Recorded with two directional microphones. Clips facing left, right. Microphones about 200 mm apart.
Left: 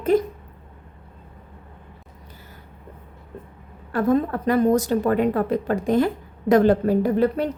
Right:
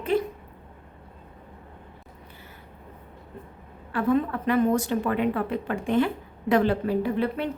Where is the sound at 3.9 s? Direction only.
40° left (ahead or behind).